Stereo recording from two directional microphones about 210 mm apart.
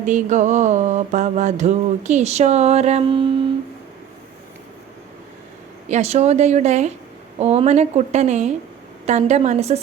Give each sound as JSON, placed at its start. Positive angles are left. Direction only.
{"t": 0.0, "sound": "mantra", "side_deg": -35}
{"t": 5.9, "sound": "mantra", "side_deg": -30}